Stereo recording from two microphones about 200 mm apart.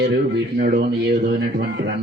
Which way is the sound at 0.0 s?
55° right (ahead or behind).